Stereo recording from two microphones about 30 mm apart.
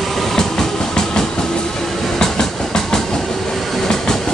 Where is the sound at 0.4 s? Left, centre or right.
Left.